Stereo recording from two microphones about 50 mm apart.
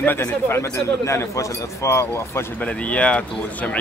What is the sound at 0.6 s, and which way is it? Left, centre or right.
Speech, left.